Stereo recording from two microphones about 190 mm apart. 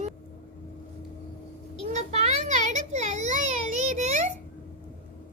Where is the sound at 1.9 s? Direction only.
35° right (ahead or behind).